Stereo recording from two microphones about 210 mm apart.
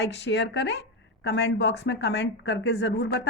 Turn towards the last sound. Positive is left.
turn(degrees=55)  # may be behind; listen again after turning